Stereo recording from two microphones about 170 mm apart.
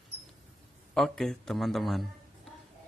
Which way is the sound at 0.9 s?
Centre (ahead or behind).